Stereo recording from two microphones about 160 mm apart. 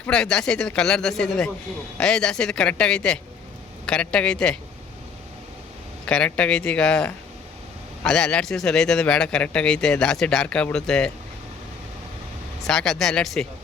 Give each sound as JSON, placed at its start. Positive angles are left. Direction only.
{"t": 0.0, "sound": "a man's voice", "side_deg": 5}
{"t": 6.1, "sound": "a man's voice", "side_deg": 5}
{"t": 12.6, "sound": "a man's voice", "side_deg": 5}